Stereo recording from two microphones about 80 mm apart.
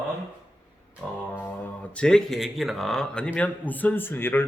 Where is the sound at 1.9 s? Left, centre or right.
Centre.